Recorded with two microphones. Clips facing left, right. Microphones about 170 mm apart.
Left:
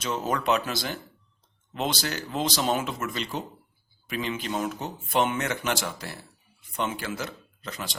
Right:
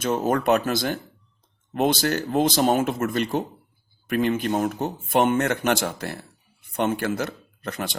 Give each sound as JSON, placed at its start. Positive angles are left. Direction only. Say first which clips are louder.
{"t": 0.0, "sound": "speech", "louder": "right 6 dB", "side_deg": -50}